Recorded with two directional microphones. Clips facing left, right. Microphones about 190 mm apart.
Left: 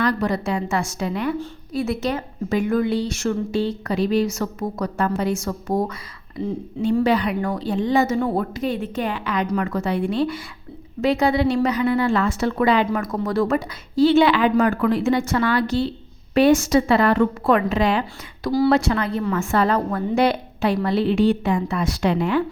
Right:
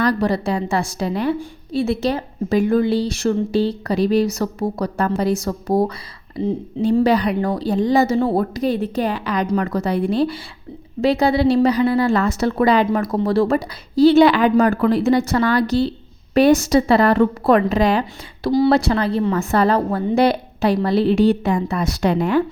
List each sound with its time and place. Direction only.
0.0 s a woman's voice: 35° right (ahead or behind)
18.4 s speech: 25° right (ahead or behind)
18.7 s a woman's voice: 35° right (ahead or behind)